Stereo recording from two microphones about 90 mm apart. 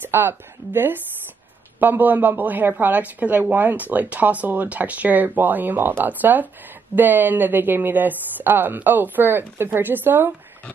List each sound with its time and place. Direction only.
0.0 s a woman's voice: 25° right (ahead or behind)